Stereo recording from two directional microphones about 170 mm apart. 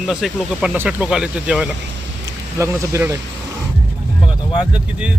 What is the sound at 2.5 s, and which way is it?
Speech, 15° right (ahead or behind).